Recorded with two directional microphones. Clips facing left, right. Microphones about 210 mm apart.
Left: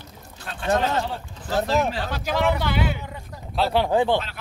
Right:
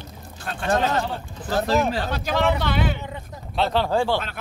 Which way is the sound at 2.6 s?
10° left (ahead or behind).